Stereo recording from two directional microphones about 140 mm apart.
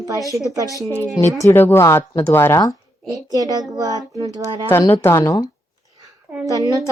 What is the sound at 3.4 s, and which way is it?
Child singing, 25° right (ahead or behind).